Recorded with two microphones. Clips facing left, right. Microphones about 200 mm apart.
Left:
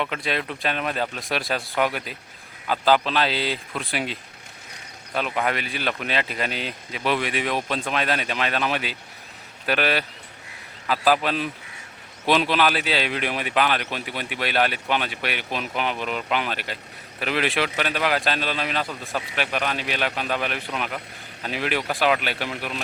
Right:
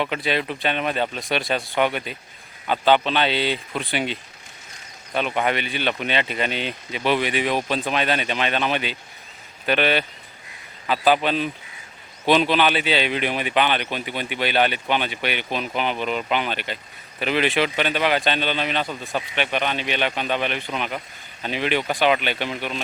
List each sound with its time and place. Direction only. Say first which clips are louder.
0.0 s speech: right 3 dB; centre (ahead or behind)